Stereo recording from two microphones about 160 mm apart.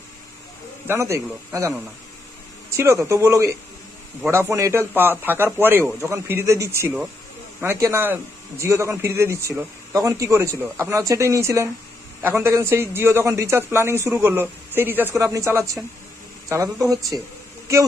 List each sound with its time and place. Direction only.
0.9 s a man's voice: 15° right (ahead or behind)